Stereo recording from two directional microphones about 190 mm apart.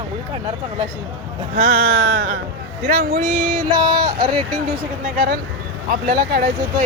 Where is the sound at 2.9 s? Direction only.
50° right (ahead or behind).